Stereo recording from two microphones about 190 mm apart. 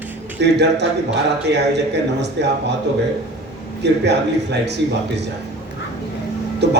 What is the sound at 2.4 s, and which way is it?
Speech, 65° right (ahead or behind).